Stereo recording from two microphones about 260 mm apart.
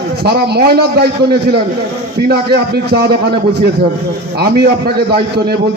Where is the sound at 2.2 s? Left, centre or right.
Right.